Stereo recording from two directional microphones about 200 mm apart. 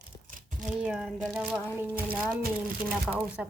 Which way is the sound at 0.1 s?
20° left (ahead or behind).